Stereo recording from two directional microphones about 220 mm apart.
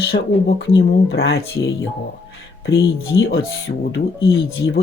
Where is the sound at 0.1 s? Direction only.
45° left (ahead or behind).